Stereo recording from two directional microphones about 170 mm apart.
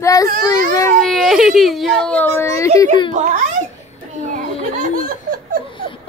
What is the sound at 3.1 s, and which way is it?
Speech, 45° right (ahead or behind).